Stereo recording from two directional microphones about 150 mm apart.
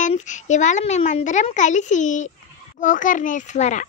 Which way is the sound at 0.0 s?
55° left (ahead or behind).